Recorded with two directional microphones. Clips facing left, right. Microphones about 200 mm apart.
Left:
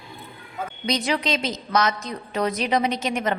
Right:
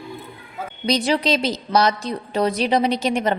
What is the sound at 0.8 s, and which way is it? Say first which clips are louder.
A woman's voice: right 5 dB; 30° right (ahead or behind).